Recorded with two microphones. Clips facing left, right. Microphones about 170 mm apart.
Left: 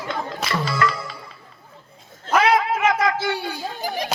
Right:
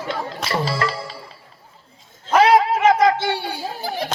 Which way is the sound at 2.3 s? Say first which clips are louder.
Right 4 dB; 30° right (ahead or behind).